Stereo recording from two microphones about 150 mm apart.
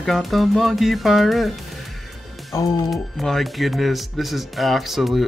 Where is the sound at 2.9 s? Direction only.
Centre (ahead or behind).